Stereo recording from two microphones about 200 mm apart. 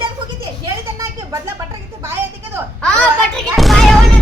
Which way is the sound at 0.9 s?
15° right (ahead or behind).